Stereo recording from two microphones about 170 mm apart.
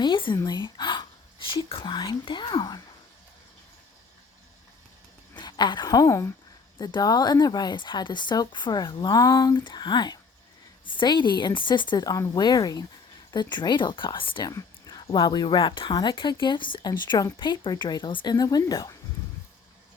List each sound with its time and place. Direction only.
0.0 s a sound: 30° left (ahead or behind)
0.3 s speech: 25° left (ahead or behind)
5.3 s a woman's voice: 25° left (ahead or behind)